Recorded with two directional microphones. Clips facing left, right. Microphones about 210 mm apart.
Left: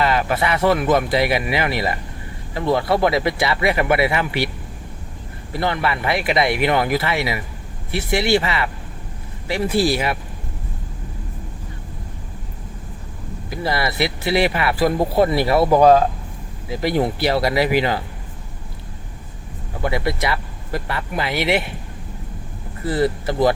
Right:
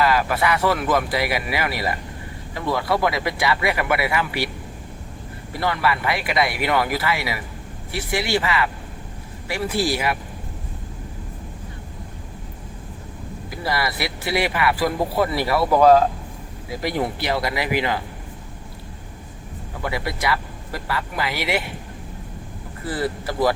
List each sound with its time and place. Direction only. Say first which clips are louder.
0.0 s speech: left 1 dB; 25° left (ahead or behind)
5.5 s speech: left 1 dB; 25° left (ahead or behind)
13.7 s speech: left 3 dB; 25° left (ahead or behind)
19.8 s speech: left 4 dB; 25° left (ahead or behind)
22.9 s speech: left 5 dB; 25° left (ahead or behind)